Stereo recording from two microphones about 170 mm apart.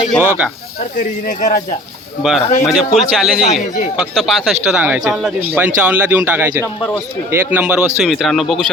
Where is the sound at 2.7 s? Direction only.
Centre (ahead or behind).